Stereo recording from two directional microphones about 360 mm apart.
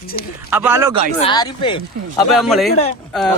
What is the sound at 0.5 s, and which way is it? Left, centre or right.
Speech, centre.